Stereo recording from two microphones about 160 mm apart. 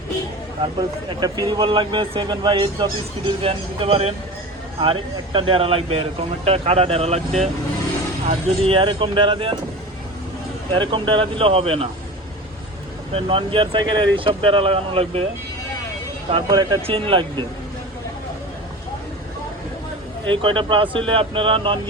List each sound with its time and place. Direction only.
0.6 s speech: 25° right (ahead or behind)
8.3 s speech: 35° right (ahead or behind)
10.8 s speech: 30° right (ahead or behind)
13.1 s speech: 35° right (ahead or behind)
16.3 s speech: 25° right (ahead or behind)
20.3 s speech: 30° right (ahead or behind)